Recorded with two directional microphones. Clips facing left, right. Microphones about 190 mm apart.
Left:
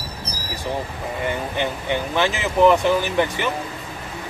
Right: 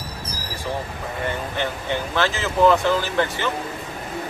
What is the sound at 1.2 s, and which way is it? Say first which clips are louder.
Speech: left 2 dB; 15° left (ahead or behind).